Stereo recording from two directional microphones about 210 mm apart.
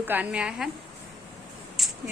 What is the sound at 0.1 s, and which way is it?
Speech, 5° right (ahead or behind).